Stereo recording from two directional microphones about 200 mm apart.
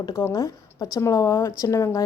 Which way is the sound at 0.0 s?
15° left (ahead or behind).